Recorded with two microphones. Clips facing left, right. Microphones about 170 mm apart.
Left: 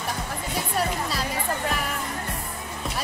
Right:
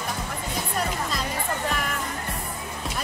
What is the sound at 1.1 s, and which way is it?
Music, 5° left (ahead or behind).